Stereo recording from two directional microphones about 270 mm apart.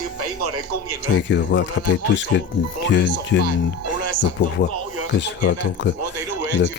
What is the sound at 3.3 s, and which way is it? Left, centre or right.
Speech, left.